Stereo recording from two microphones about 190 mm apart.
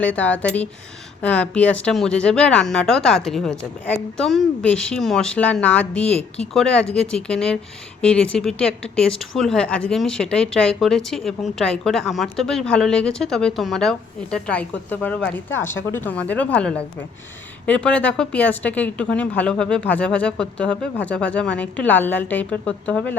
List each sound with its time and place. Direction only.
0.0 s speech: 10° left (ahead or behind)